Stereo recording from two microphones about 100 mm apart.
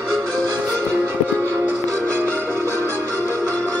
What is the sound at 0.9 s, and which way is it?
Music, 25° right (ahead or behind).